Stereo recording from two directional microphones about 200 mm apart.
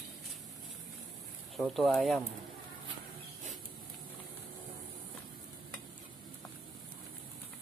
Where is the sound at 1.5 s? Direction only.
Centre (ahead or behind).